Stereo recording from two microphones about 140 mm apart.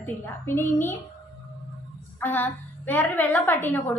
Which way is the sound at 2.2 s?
15° left (ahead or behind).